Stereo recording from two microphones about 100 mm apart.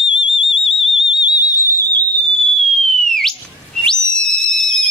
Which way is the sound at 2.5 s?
Centre (ahead or behind).